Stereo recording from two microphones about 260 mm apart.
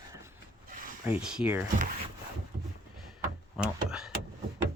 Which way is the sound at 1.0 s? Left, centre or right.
Centre.